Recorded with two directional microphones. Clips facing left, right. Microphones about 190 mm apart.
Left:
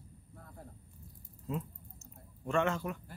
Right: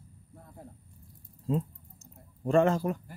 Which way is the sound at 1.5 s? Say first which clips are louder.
Right 8 dB; 30° right (ahead or behind).